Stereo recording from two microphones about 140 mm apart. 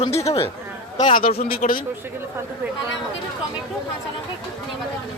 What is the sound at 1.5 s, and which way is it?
Speech, 90° left.